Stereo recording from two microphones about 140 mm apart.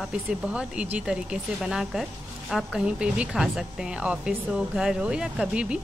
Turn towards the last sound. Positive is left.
turn(degrees=-5)  # may be behind; listen again after turning